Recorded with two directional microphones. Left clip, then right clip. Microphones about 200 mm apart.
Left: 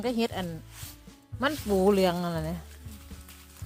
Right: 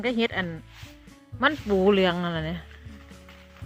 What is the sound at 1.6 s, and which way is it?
Speech, 15° left (ahead or behind).